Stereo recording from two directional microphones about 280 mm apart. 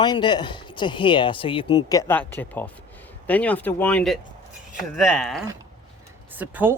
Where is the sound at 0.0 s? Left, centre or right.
Centre.